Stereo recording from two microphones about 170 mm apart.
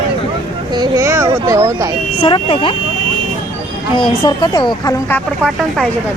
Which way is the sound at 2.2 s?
30° left (ahead or behind).